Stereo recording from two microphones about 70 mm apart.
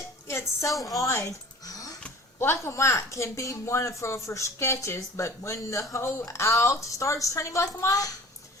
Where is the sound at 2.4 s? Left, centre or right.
Left.